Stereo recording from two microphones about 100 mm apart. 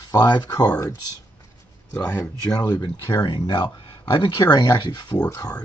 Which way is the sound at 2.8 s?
50° left (ahead or behind).